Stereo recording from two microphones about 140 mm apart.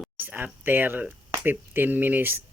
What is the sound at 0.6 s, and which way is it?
Speech, 15° right (ahead or behind).